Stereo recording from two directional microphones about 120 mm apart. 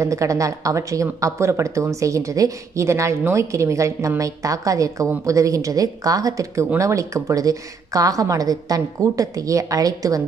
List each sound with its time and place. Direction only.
0.0 s speech: 25° right (ahead or behind)